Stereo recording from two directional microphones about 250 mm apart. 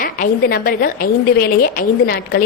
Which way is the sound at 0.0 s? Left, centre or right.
Left.